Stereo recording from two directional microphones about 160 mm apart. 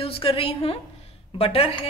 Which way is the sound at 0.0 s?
35° left (ahead or behind).